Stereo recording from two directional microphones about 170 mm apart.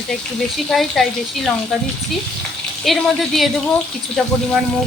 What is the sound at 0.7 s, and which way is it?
Speech, centre (ahead or behind).